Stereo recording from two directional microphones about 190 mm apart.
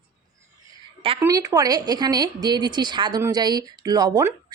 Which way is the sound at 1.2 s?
20° right (ahead or behind).